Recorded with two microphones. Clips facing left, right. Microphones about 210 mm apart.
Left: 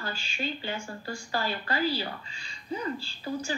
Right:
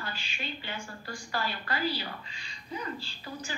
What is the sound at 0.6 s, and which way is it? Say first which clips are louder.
A woman's voice: left 5 dB; 30° left (ahead or behind).